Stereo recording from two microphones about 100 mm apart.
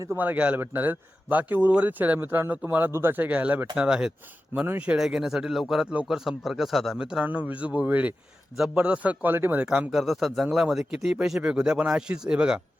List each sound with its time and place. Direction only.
0.2 s speech: 15° right (ahead or behind)
8.5 s speech: 5° right (ahead or behind)
9.9 s speech: centre (ahead or behind)